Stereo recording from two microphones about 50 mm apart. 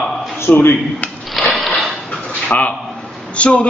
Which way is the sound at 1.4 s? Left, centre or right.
Centre.